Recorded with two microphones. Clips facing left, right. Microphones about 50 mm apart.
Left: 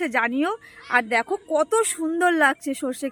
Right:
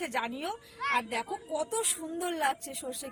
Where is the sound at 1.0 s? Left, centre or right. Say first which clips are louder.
Left 12 dB; left.